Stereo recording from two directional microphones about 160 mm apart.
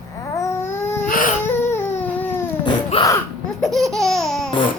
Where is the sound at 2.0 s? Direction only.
10° left (ahead or behind).